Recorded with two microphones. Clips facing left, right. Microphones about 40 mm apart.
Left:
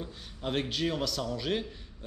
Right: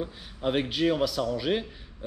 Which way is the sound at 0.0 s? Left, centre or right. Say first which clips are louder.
Right 7 dB; centre.